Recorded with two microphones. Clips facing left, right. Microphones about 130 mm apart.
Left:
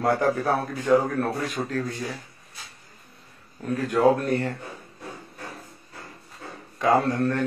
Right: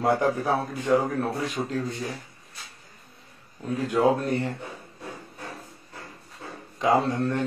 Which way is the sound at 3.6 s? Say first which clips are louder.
Left 2 dB; 20° right (ahead or behind).